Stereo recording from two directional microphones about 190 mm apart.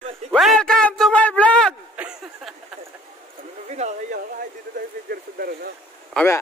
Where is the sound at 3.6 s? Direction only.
35° right (ahead or behind).